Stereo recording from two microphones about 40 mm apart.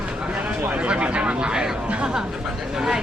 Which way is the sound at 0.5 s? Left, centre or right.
Right.